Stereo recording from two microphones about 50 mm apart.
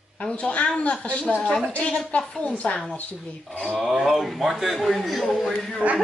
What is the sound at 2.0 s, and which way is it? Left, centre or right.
Speech, left.